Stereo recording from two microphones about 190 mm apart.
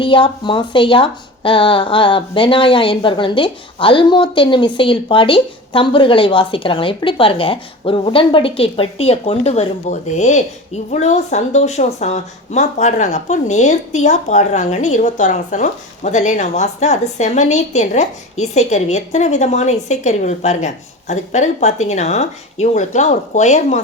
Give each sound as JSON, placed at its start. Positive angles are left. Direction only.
{"t": 0.0, "sound": "speech", "side_deg": 25}